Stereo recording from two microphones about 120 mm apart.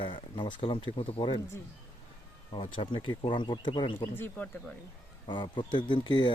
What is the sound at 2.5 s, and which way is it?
Speech, 45° left (ahead or behind).